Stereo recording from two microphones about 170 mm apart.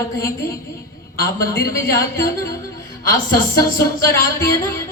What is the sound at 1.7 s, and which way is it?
Music, 20° left (ahead or behind).